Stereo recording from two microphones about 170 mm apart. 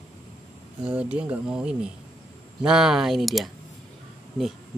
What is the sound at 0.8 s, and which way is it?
Speech, 5° right (ahead or behind).